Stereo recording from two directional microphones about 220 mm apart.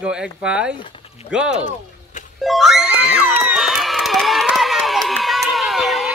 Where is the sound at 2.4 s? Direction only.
Centre (ahead or behind).